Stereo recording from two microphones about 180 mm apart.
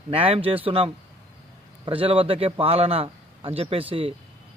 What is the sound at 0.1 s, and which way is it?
A man's voice, 30° right (ahead or behind).